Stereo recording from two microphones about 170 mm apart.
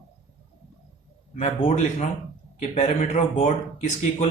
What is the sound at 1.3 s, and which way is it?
A man's voice, 40° left (ahead or behind).